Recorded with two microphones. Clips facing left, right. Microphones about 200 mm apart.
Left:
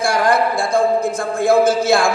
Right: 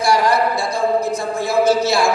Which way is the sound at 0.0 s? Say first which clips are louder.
Even; 50° left (ahead or behind).